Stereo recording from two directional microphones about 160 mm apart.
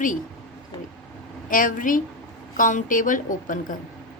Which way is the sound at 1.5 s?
55° left (ahead or behind).